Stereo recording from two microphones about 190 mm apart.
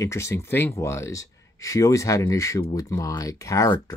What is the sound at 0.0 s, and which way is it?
Speech, 15° left (ahead or behind).